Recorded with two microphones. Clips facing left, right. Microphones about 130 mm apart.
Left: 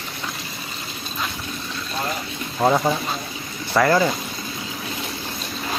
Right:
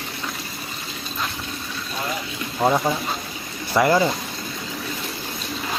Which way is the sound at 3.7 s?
15° right (ahead or behind).